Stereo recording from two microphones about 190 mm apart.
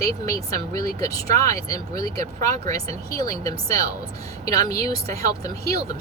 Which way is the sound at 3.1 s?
15° left (ahead or behind).